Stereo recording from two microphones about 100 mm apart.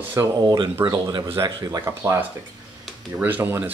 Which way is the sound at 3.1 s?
20° right (ahead or behind).